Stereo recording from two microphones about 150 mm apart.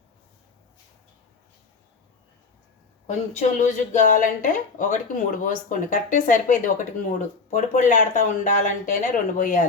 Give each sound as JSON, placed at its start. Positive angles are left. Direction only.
{"t": 3.3, "sound": "speech", "side_deg": 55}